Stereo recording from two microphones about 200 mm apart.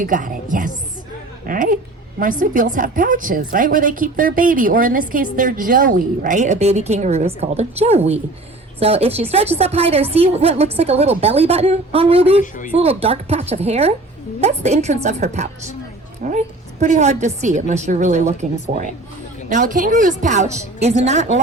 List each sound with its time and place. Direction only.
0.0 s a woman's voice: 40° right (ahead or behind)
1.5 s a woman's voice: 45° right (ahead or behind)
12.4 s speech: 40° left (ahead or behind)
12.7 s a woman's voice: 30° right (ahead or behind)